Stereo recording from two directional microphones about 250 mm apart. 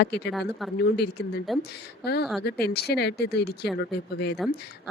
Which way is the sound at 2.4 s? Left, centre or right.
Left.